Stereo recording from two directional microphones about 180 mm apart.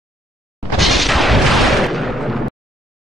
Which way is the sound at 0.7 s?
Centre (ahead or behind).